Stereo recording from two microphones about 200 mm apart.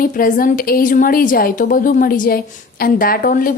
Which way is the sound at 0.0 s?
45° left (ahead or behind).